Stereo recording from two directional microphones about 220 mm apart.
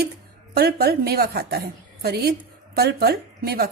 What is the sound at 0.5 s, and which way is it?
A woman's voice, 45° right (ahead or behind).